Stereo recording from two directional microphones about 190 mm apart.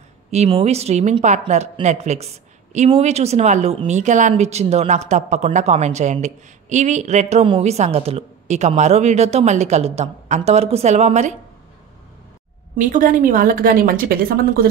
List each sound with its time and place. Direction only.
0.3 s a woman's voice: 30° right (ahead or behind)
12.7 s a woman's voice: 45° right (ahead or behind)